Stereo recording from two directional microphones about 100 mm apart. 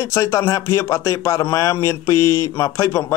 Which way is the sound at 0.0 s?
30° left (ahead or behind).